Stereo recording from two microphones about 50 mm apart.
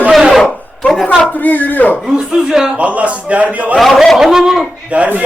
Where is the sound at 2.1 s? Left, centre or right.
Centre.